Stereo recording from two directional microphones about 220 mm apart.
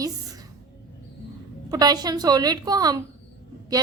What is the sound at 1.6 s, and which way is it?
A woman's voice, 15° right (ahead or behind).